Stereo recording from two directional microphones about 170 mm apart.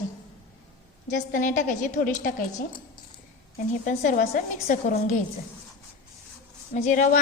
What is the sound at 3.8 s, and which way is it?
A woman's voice, 50° left (ahead or behind).